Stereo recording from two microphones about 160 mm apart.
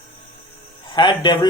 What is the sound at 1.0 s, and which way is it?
Speech, 25° left (ahead or behind).